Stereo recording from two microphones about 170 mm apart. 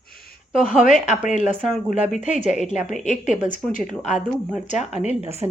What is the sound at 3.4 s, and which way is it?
Speech, 50° left (ahead or behind).